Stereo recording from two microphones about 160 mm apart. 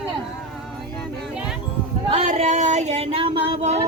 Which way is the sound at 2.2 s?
50° right (ahead or behind).